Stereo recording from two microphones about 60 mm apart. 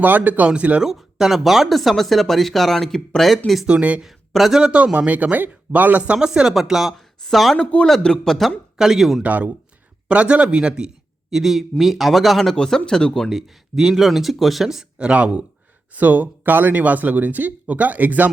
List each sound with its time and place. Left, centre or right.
0.0 s speech: right
0.8 s speech: centre
3.7 s speech: right
4.0 s speech: centre
4.6 s speech: centre
6.1 s speech: centre
7.6 s a man's voice: centre
9.2 s a man's voice: right; by 13.3 s centre
13.3 s speech: centre
14.9 s speech: centre